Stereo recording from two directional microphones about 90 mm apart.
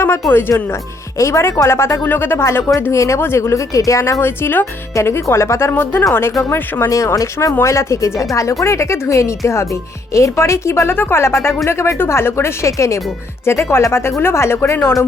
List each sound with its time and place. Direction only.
0.0 s a woman's voice: 25° left (ahead or behind)